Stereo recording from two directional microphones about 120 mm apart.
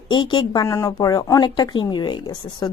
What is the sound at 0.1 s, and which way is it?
Speech, 40° left (ahead or behind).